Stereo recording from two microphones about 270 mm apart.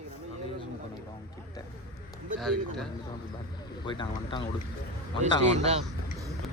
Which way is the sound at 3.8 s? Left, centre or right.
Centre.